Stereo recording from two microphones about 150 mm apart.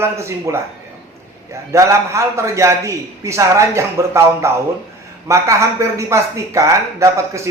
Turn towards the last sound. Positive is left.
turn(degrees=-20)  # may be behind; listen again after turning